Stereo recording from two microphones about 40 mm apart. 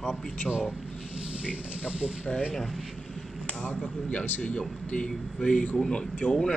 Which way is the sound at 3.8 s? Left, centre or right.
Left.